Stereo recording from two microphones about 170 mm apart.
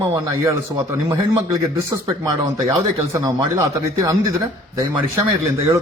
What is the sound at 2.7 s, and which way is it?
A man's voice, 20° right (ahead or behind).